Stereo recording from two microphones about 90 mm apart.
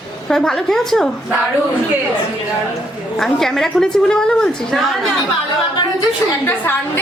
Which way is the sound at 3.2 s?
5° left (ahead or behind).